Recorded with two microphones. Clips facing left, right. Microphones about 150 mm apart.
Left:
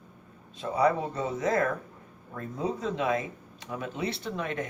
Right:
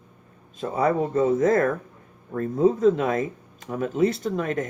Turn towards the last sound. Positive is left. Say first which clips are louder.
# right 7 dB
turn(degrees=-45)  # may be behind; listen again after turning